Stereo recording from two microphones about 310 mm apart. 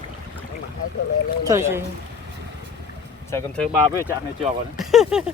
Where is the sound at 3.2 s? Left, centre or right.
Centre.